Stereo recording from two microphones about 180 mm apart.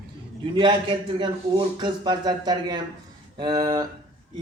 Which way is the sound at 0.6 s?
25° right (ahead or behind).